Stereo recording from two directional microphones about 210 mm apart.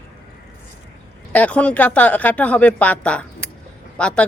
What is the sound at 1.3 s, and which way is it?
Speech, 5° left (ahead or behind).